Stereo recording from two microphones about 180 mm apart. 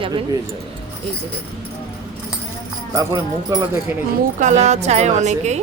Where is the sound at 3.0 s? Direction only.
20° right (ahead or behind).